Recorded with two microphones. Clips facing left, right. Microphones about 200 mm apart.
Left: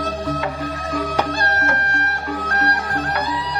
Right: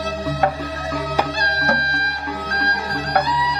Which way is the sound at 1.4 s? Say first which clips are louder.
Even; 50° left (ahead or behind).